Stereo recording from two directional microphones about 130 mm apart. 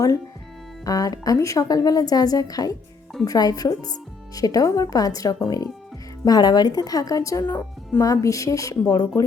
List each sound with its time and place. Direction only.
0.9 s speech: 30° left (ahead or behind)